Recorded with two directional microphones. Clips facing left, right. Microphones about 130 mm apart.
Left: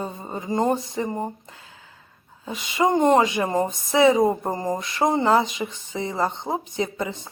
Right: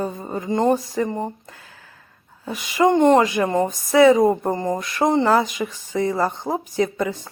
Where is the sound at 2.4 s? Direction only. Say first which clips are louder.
Right 4 dB; 25° left (ahead or behind).